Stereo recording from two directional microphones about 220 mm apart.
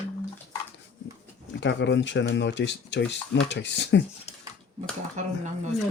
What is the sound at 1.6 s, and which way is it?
Speech, 55° left (ahead or behind).